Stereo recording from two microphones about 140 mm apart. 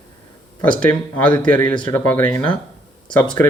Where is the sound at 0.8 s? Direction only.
10° left (ahead or behind).